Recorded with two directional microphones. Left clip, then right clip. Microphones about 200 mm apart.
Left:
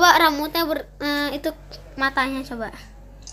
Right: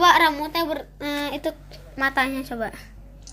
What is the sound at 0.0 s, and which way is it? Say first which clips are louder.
Speech: left 1 dB; 10° left (ahead or behind).